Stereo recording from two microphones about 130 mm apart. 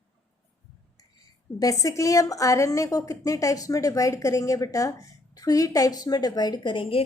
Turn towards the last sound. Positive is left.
turn(degrees=40)  # may be behind; listen again after turning